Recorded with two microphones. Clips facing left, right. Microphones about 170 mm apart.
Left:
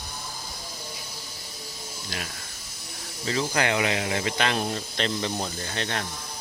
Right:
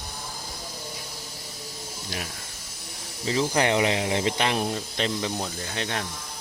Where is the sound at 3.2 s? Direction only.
20° right (ahead or behind).